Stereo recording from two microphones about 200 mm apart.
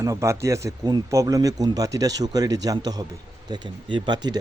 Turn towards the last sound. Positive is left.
turn(degrees=-25)  # may be behind; listen again after turning